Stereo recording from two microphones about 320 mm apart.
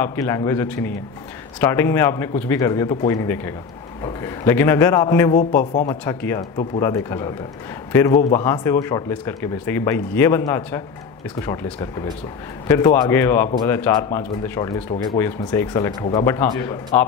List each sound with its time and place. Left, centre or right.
0.0 s speech: centre
5.3 s a man's voice: left
5.9 s speech: centre